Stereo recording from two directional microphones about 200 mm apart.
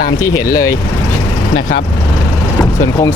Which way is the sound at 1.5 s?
55° left (ahead or behind).